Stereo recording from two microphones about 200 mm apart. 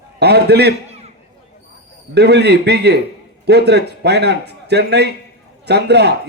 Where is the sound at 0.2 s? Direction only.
55° right (ahead or behind).